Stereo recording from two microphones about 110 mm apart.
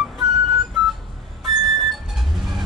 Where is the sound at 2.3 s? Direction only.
Centre (ahead or behind).